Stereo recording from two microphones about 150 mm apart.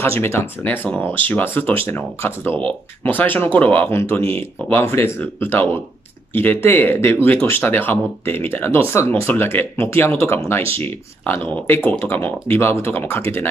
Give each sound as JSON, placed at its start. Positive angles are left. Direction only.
{"t": 0.2, "sound": "speech", "side_deg": 15}